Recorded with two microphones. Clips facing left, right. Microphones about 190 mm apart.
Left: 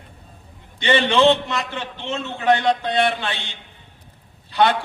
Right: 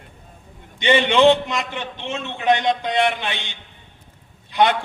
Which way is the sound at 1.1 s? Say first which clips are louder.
Right 1 dB; 15° right (ahead or behind).